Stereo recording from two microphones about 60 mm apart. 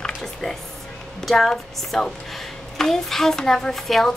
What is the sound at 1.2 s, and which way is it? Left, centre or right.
A woman's voice, centre.